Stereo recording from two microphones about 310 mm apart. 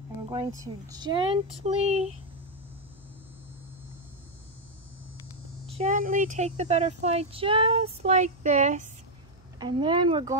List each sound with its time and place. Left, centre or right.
0.3 s speech: centre
5.7 s speech: right